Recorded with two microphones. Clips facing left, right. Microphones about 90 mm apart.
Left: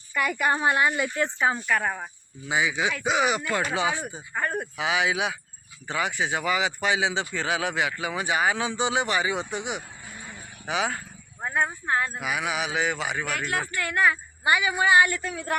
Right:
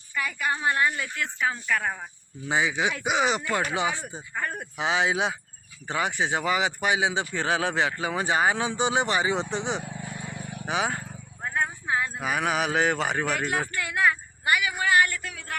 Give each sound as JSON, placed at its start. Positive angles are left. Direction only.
{"t": 0.1, "sound": "a woman's voice", "side_deg": 65}
{"t": 0.6, "sound": "a woman's voice", "side_deg": 20}
{"t": 1.7, "sound": "a woman's voice", "side_deg": 5}
{"t": 2.5, "sound": "speech", "side_deg": -30}
{"t": 3.8, "sound": "speech", "side_deg": 15}
{"t": 4.8, "sound": "speech", "side_deg": -25}
{"t": 7.3, "sound": "speech", "side_deg": -30}
{"t": 11.4, "sound": "clip-clop", "side_deg": 15}
{"t": 11.9, "sound": "speech", "side_deg": 50}
{"t": 12.2, "sound": "speech", "side_deg": -40}
{"t": 13.9, "sound": "a woman's voice", "side_deg": 0}
{"t": 14.4, "sound": "a woman's voice", "side_deg": 25}